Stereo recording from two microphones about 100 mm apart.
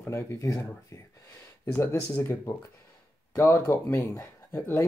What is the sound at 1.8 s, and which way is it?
Speech, 25° left (ahead or behind).